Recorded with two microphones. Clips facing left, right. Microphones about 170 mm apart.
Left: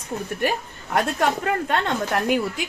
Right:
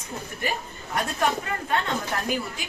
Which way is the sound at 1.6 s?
70° left (ahead or behind).